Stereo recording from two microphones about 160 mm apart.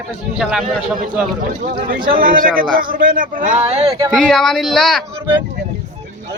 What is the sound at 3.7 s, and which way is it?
Speech, 40° right (ahead or behind).